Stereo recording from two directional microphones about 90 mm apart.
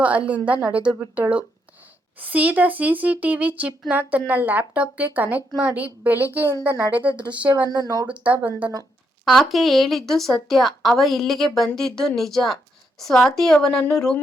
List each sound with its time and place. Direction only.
0.0 s speech: 15° right (ahead or behind)
7.5 s speech: 45° right (ahead or behind)
8.0 s speech: 15° right (ahead or behind)
9.2 s speech: centre (ahead or behind)